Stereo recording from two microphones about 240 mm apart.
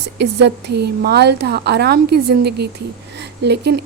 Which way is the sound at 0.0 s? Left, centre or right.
Right.